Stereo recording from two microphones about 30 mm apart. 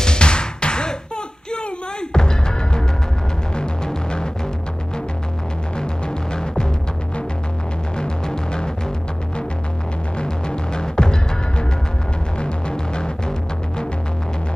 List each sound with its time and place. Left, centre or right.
0.0 s music: left
5.8 s music: left
8.0 s music: left
10.1 s music: left